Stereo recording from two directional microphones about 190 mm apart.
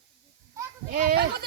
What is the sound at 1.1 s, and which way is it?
Bleat, 55° right (ahead or behind).